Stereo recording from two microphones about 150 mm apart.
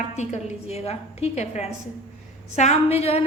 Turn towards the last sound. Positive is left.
turn(degrees=45)  # may be behind; listen again after turning